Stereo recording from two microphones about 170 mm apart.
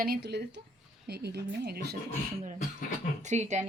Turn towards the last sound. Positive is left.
turn(degrees=-40)  # may be behind; listen again after turning